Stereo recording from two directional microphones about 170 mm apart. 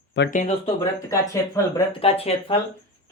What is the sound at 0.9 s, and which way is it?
Speech, 20° left (ahead or behind).